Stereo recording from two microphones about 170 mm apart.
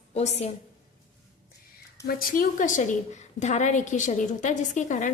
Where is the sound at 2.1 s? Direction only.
60° left (ahead or behind).